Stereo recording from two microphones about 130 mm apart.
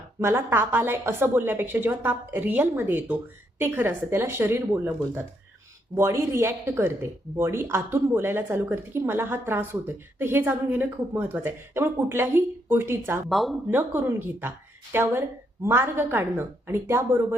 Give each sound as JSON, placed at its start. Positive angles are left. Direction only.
{"t": 0.2, "sound": "speech", "side_deg": -20}
{"t": 13.2, "sound": "speech", "side_deg": 0}
{"t": 13.7, "sound": "speech", "side_deg": -15}